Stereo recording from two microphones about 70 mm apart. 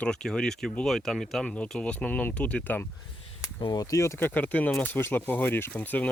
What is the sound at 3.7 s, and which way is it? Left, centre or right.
Speech, left.